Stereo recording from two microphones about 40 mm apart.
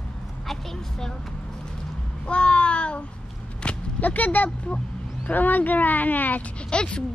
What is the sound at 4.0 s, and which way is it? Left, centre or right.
Speech, left.